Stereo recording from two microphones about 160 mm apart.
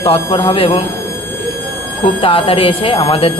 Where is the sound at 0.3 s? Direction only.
15° left (ahead or behind).